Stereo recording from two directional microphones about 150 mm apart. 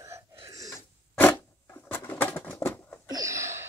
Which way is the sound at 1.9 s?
15° left (ahead or behind).